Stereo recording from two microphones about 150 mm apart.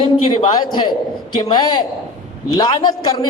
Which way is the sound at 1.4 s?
30° left (ahead or behind).